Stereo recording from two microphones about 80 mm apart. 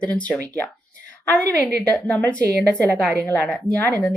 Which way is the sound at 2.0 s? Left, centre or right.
Centre.